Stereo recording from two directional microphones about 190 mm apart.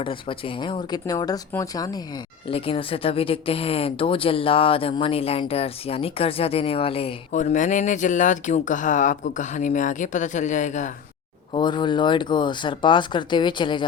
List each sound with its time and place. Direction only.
0.0 s speech: 25° left (ahead or behind)
11.5 s speech: 25° left (ahead or behind)